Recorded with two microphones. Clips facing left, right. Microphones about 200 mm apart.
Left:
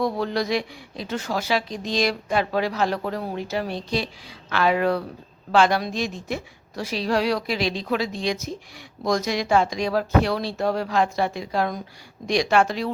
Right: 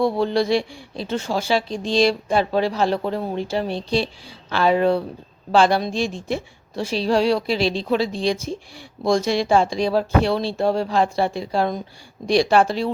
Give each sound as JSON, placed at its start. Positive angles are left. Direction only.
{"t": 0.0, "sound": "a woman's voice", "side_deg": -30}